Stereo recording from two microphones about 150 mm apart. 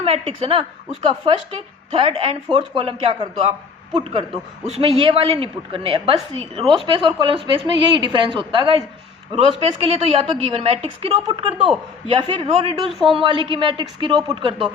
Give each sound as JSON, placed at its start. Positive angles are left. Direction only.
{"t": 0.0, "sound": "a woman's voice", "side_deg": -40}
{"t": 12.9, "sound": "a woman's voice", "side_deg": 0}
{"t": 13.1, "sound": "a woman's voice", "side_deg": -35}